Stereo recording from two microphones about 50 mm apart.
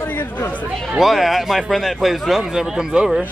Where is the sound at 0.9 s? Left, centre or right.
Centre.